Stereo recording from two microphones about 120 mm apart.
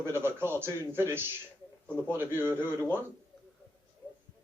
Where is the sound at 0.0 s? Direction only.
20° right (ahead or behind).